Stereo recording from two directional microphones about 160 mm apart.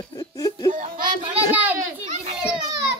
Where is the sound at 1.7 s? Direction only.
50° right (ahead or behind).